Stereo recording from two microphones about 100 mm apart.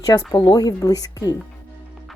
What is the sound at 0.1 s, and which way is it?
A woman's voice, 35° left (ahead or behind).